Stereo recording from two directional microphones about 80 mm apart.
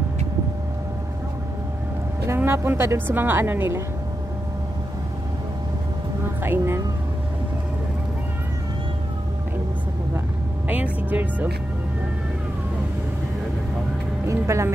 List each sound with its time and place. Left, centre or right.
2.2 s a woman's voice: right
6.4 s speech: right
10.7 s music: centre
14.2 s speech: right